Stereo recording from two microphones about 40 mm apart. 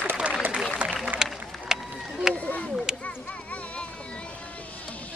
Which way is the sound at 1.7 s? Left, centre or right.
Centre.